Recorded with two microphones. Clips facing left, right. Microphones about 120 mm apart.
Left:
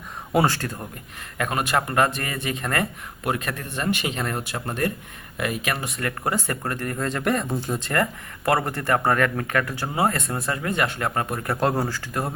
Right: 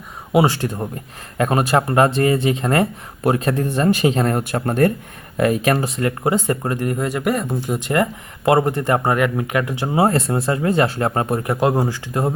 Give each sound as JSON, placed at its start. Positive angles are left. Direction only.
{"t": 0.3, "sound": "speech", "side_deg": -15}
{"t": 1.4, "sound": "speech", "side_deg": -35}
{"t": 7.8, "sound": "speech", "side_deg": -15}
{"t": 11.4, "sound": "speech", "side_deg": -15}